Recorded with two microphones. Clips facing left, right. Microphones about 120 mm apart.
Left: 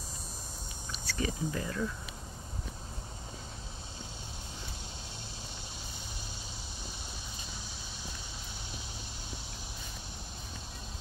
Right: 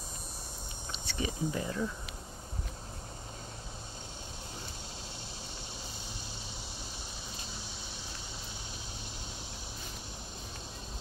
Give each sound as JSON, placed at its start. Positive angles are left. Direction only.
{"t": 0.9, "sound": "speech", "side_deg": -20}